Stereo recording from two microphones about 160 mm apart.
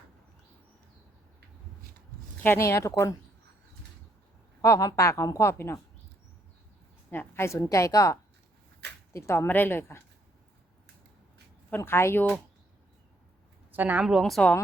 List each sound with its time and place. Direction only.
2.4 s a woman's voice: 15° left (ahead or behind)
4.6 s a woman's voice: 20° left (ahead or behind)
7.1 s a woman's voice: 15° left (ahead or behind)
11.7 s a woman's voice: 15° left (ahead or behind)
13.7 s a woman's voice: 10° right (ahead or behind)